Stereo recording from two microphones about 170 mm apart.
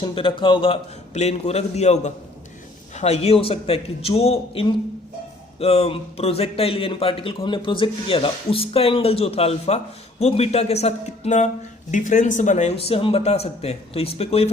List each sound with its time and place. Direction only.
0.0 s speech: 30° left (ahead or behind)